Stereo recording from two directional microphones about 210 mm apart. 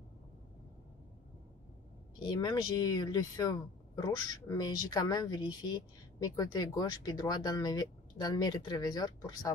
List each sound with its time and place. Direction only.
2.2 s a woman's voice: 20° left (ahead or behind)